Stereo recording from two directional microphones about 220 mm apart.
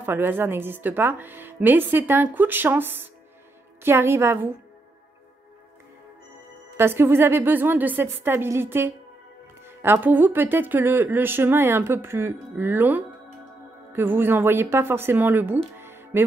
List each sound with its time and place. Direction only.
0.0 s speech: 10° right (ahead or behind)
6.8 s speech: 10° right (ahead or behind)